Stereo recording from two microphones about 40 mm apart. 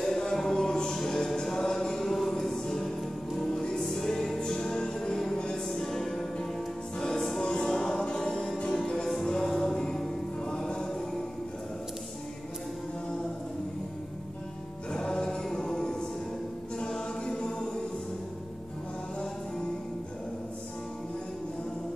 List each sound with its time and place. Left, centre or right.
0.0 s music: centre
15.0 s music: centre
16.7 s choir: centre